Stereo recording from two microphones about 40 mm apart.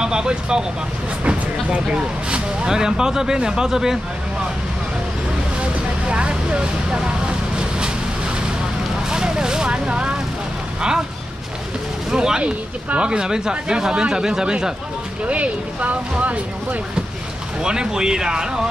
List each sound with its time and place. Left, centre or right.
0.0 s speech: centre
5.6 s vehicle: right
9.1 s vehicle: centre
12.1 s speech: centre
15.2 s speech: right
17.6 s speech: centre